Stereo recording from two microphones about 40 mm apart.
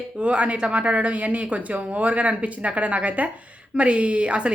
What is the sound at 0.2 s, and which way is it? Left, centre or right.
A woman's voice, right.